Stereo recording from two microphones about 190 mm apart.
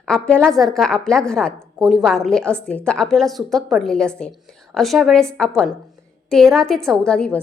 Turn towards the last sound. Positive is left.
turn(degrees=5)  # may be behind; listen again after turning